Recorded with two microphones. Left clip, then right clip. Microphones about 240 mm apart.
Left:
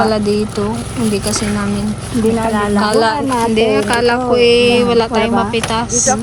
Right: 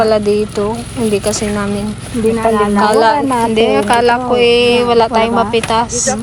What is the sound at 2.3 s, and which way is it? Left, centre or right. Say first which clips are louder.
Speech: right 5 dB; right.